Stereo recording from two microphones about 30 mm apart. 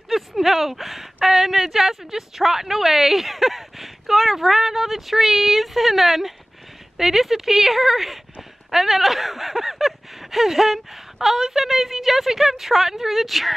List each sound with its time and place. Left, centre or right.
0.1 s speech: centre